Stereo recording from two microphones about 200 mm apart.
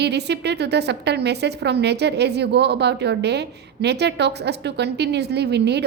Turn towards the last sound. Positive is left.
turn(degrees=-55)  # may be behind; listen again after turning